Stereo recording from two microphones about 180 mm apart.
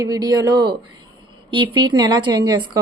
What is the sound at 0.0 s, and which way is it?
A woman's voice, 20° right (ahead or behind).